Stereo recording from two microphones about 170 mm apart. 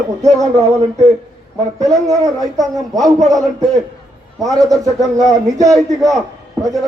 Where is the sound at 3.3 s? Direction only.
20° right (ahead or behind).